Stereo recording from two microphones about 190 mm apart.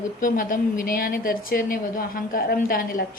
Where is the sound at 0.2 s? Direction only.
45° left (ahead or behind).